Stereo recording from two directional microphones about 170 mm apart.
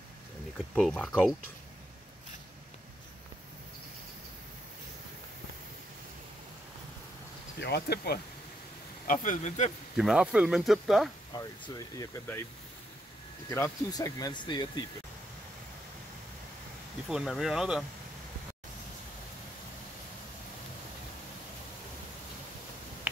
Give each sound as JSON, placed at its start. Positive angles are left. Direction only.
{"t": 0.7, "sound": "speech", "side_deg": 5}
{"t": 7.6, "sound": "speech", "side_deg": 70}
{"t": 9.0, "sound": "speech", "side_deg": 50}
{"t": 9.9, "sound": "speech", "side_deg": -5}
{"t": 11.3, "sound": "speech", "side_deg": 25}
{"t": 13.5, "sound": "speech", "side_deg": 15}
{"t": 17.1, "sound": "speech", "side_deg": 0}